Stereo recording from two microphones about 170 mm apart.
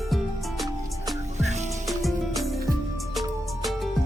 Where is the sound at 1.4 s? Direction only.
40° right (ahead or behind).